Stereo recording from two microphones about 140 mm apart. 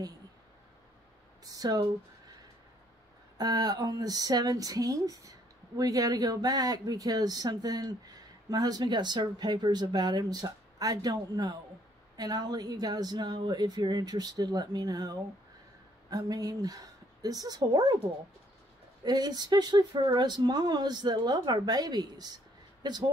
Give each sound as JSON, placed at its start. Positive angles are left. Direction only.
{"t": 1.4, "sound": "speech", "side_deg": -25}
{"t": 3.3, "sound": "speech", "side_deg": -25}
{"t": 19.0, "sound": "speech", "side_deg": -30}